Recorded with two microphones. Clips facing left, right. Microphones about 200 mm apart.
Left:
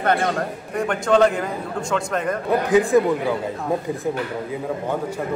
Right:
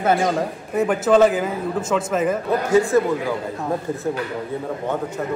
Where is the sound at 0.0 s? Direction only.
5° right (ahead or behind).